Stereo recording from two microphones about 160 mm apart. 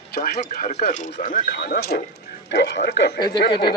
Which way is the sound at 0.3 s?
50° left (ahead or behind).